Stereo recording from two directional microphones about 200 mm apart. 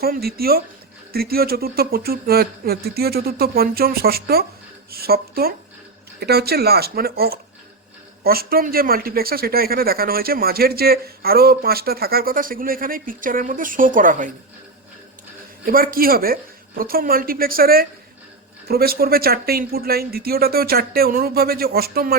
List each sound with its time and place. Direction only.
0.0 s speech: 50° right (ahead or behind)
15.6 s speech: 45° right (ahead or behind)